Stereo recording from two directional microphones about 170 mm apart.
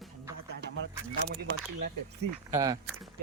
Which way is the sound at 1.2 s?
65° right (ahead or behind).